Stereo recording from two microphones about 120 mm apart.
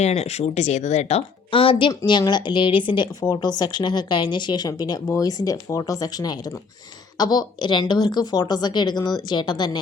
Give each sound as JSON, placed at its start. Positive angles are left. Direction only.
{"t": 0.0, "sound": "speech", "side_deg": 65}